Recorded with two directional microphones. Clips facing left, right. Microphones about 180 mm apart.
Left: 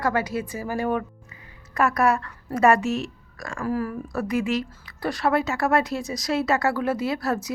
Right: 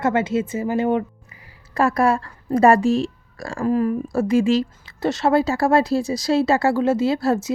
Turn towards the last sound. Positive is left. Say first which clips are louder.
# right 6 dB
turn(degrees=-25)  # may be behind; listen again after turning